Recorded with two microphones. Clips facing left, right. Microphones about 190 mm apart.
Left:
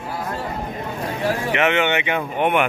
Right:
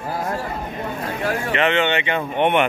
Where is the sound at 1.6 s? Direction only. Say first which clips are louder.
Right 1 dB; 15° left (ahead or behind).